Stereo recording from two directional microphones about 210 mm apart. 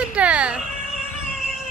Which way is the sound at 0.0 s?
5° right (ahead or behind).